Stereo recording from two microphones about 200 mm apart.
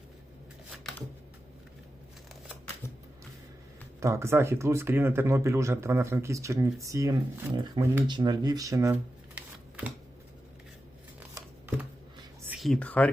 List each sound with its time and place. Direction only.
4.0 s speech: 15° right (ahead or behind)
12.5 s speech: centre (ahead or behind)